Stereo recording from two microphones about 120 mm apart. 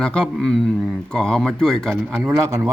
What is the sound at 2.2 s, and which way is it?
Speech, 20° right (ahead or behind).